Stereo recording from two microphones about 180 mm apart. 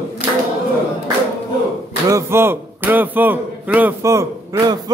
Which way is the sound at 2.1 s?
15° right (ahead or behind).